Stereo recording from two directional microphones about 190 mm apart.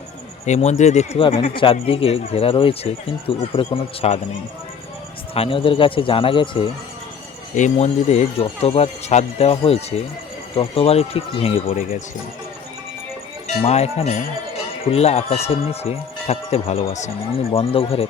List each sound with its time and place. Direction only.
0.4 s speech: 35° left (ahead or behind)
5.3 s speech: 30° left (ahead or behind)
7.5 s speech: 40° left (ahead or behind)
13.7 s speech: 35° left (ahead or behind)